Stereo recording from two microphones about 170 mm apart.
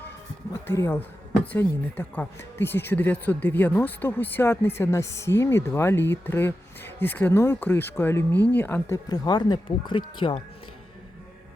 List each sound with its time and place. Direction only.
0.5 s speech: 15° left (ahead or behind)
9.0 s speech: 25° left (ahead or behind)